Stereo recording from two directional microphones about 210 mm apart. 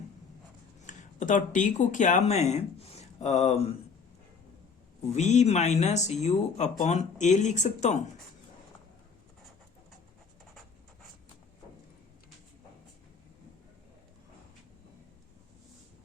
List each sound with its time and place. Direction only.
0.9 s speech: 35° left (ahead or behind)
5.0 s speech: 35° left (ahead or behind)